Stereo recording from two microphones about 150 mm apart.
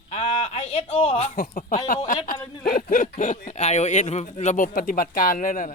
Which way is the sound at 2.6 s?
75° left (ahead or behind).